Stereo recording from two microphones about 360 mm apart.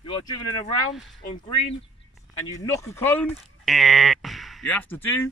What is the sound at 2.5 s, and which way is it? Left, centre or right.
Speech, centre.